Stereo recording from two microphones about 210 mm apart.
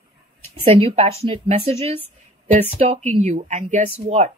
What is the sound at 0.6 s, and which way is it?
Speech, 30° right (ahead or behind).